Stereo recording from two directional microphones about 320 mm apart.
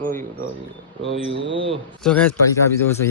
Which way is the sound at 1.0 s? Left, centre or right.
Right.